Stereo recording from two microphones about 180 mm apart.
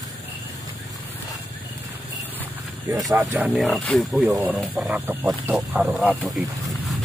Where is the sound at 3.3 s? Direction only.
5° right (ahead or behind).